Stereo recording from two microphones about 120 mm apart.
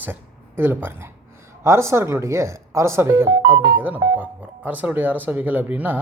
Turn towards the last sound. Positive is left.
turn(degrees=-15)  # may be behind; listen again after turning